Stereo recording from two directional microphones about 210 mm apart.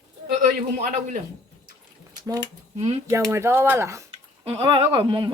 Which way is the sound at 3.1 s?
15° right (ahead or behind).